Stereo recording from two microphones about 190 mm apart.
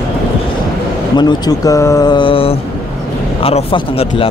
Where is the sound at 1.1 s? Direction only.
20° left (ahead or behind).